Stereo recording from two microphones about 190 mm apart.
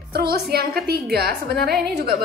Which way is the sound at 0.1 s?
55° right (ahead or behind).